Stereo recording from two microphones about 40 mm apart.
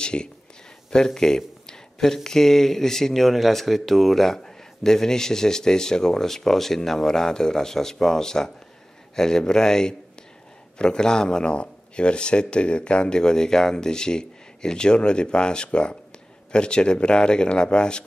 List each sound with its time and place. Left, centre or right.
0.0 s speech: left
0.8 s a sound: centre
2.2 s speech: centre